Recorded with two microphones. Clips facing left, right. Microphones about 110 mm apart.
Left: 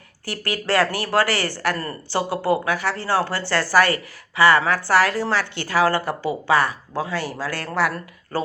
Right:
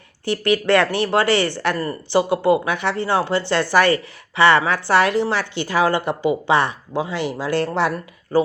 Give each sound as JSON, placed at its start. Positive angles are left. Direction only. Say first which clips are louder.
{"t": 0.3, "sound": "speech", "louder": "right 7 dB", "side_deg": -20}
{"t": 7.9, "sound": "speech", "louder": "right 8 dB", "side_deg": -15}